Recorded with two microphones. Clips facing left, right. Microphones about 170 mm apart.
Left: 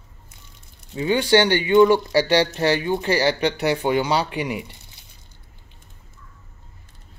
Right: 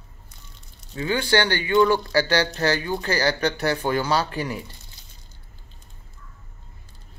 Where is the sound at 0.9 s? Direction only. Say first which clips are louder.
Left 4 dB; 20° left (ahead or behind).